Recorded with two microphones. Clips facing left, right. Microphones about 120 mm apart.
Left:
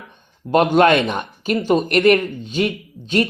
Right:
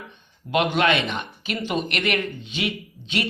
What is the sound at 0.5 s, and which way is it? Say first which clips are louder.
Speech: left 7 dB; 45° left (ahead or behind).